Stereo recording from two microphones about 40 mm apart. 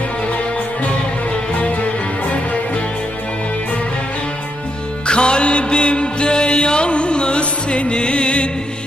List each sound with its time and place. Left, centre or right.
1.5 s music: left
5.0 s music: left